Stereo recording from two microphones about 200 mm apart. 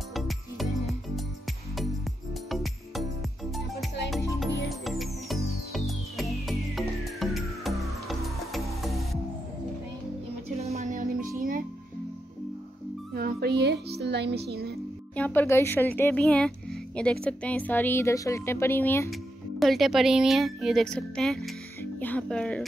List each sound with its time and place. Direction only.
0.1 s music: centre (ahead or behind)
2.5 s music: centre (ahead or behind)
4.6 s music: centre (ahead or behind)
10.6 s music: 35° right (ahead or behind)
13.1 s music: 50° right (ahead or behind)
15.1 s speech: 10° left (ahead or behind)
19.6 s a woman's voice: centre (ahead or behind)